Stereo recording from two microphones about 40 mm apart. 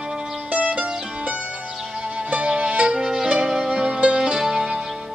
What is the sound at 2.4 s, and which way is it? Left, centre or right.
Music, right.